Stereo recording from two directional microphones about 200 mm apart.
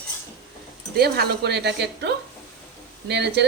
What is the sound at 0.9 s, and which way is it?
A woman's voice, 50° right (ahead or behind).